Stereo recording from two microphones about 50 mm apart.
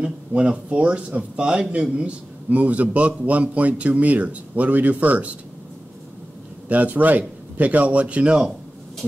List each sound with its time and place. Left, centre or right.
0.0 s speech: right
6.7 s a man's voice: right